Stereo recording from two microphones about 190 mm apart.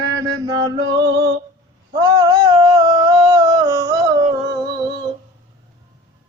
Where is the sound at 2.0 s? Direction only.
20° right (ahead or behind).